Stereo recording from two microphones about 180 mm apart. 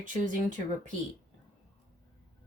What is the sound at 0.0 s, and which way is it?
Speech, 45° right (ahead or behind).